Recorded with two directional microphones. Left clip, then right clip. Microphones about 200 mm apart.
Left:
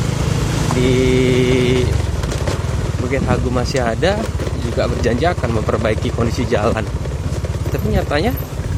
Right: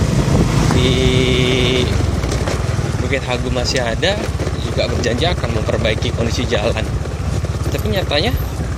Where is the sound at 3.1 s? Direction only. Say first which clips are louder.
Left 1 dB; 20° left (ahead or behind).